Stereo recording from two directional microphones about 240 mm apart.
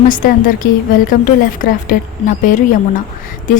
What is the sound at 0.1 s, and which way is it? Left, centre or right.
A woman's voice, left.